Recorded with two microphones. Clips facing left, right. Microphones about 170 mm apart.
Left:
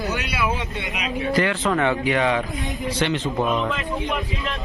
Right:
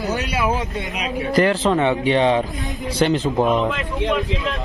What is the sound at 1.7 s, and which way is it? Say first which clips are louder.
Speech: right 3 dB; 20° right (ahead or behind).